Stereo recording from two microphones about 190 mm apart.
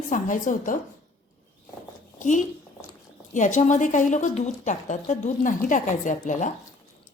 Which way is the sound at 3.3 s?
40° left (ahead or behind).